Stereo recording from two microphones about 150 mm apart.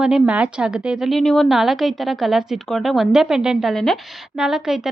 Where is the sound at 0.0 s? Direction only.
5° right (ahead or behind).